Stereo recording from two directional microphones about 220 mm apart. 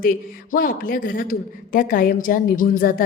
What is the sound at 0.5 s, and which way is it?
A woman's voice, 40° left (ahead or behind).